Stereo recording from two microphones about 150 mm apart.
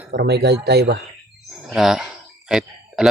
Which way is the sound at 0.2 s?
90° right.